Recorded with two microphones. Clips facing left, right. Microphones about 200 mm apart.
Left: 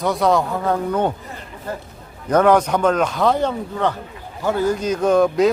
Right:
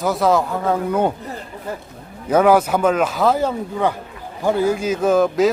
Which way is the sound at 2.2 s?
5° right (ahead or behind).